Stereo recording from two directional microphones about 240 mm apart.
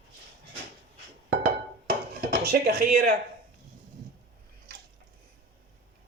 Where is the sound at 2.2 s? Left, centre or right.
Right.